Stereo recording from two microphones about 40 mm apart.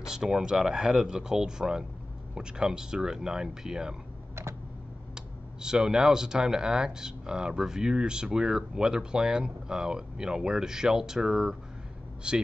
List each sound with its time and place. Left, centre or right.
0.0 s speech: centre
5.1 s speech: centre
12.2 s speech: right